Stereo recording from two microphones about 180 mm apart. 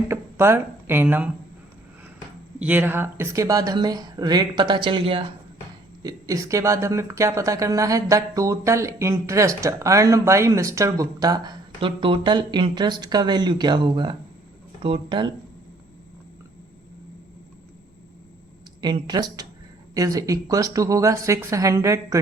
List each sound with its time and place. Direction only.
0.1 s speech: 15° right (ahead or behind)
2.6 s speech: 10° right (ahead or behind); by 5.2 s 30° right (ahead or behind)
6.0 s speech: 20° right (ahead or behind)
18.8 s speech: 25° right (ahead or behind)